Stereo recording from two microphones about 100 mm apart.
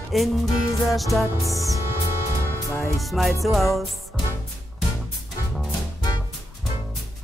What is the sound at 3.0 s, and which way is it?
Music, centre (ahead or behind).